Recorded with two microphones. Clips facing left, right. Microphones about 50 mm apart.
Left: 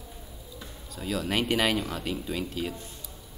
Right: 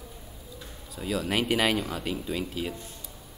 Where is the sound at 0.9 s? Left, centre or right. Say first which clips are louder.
Right 1 dB; centre.